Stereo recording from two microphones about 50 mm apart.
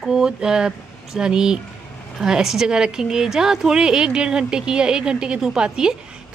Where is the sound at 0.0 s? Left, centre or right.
Centre.